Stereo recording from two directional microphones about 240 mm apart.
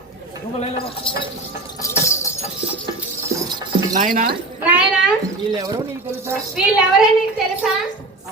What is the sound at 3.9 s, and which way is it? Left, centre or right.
Speech, right.